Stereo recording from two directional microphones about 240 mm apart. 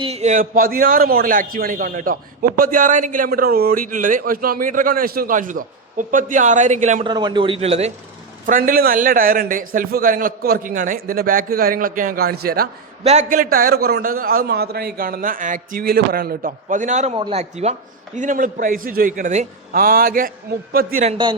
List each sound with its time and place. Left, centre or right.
0.0 s a man's voice: right
7.1 s a man's voice: centre